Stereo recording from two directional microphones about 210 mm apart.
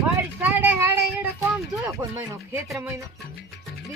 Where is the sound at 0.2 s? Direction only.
10° right (ahead or behind).